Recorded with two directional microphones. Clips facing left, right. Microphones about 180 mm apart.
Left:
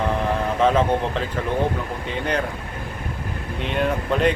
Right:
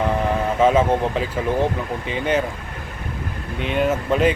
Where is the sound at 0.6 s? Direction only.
5° right (ahead or behind).